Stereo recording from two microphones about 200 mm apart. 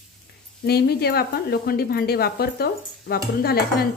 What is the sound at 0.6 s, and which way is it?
Speech, 50° left (ahead or behind).